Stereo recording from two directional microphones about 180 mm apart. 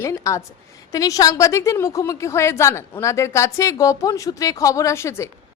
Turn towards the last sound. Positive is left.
turn(degrees=15)  # may be behind; listen again after turning